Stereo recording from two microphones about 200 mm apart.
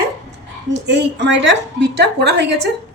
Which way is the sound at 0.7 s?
60° right (ahead or behind).